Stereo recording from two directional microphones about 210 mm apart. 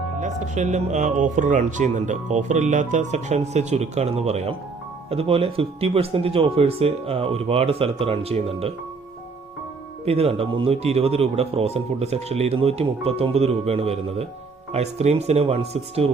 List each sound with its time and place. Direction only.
0.2 s speech: 35° right (ahead or behind)
10.1 s speech: 25° right (ahead or behind)